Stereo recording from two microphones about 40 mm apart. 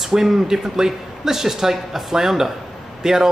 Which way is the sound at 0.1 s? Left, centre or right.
Centre.